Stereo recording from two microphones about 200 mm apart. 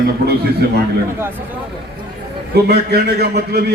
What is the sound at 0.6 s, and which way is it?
Speech, 50° right (ahead or behind).